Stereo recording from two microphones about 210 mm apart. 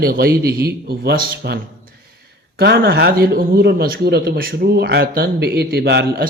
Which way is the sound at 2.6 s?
50° right (ahead or behind).